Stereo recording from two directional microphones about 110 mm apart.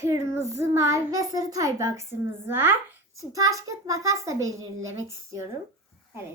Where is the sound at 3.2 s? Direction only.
30° right (ahead or behind).